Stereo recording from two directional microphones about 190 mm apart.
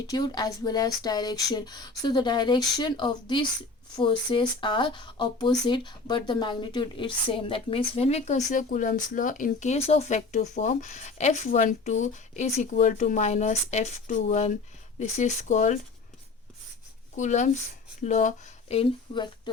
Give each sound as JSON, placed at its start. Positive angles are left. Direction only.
{"t": 0.1, "sound": "speech", "side_deg": 20}
{"t": 17.2, "sound": "speech", "side_deg": 40}